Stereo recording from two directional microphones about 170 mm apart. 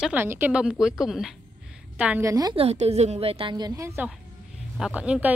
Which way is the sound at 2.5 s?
35° right (ahead or behind).